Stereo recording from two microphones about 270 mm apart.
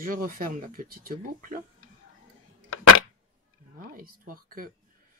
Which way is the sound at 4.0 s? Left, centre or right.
Right.